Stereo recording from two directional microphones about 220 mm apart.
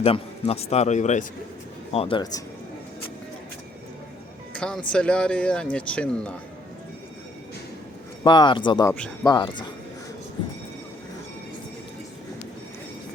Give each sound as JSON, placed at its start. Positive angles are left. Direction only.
{"t": 0.0, "sound": "a man's voice", "side_deg": 25}
{"t": 4.5, "sound": "speech", "side_deg": 5}
{"t": 8.2, "sound": "a man's voice", "side_deg": 20}